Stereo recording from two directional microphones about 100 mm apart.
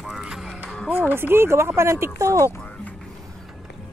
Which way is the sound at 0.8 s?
20° right (ahead or behind).